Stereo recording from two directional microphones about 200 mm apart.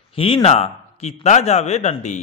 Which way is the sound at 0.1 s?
30° left (ahead or behind).